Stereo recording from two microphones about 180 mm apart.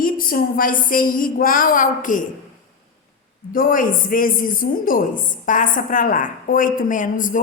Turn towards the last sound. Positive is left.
turn(degrees=45)  # may be behind; listen again after turning